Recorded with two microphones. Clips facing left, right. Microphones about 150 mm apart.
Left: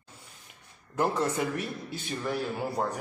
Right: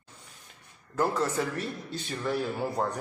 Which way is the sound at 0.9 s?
15° left (ahead or behind).